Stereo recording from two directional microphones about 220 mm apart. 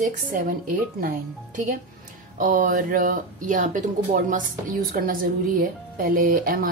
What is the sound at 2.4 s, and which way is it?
Speech, 35° right (ahead or behind).